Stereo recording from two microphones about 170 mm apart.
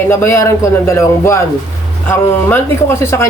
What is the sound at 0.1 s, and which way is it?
Speech, 15° left (ahead or behind).